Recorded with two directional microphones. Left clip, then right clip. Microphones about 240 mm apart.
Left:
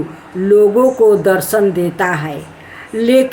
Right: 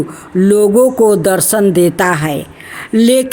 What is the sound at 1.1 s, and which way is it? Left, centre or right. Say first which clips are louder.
A woman's voice: even; right.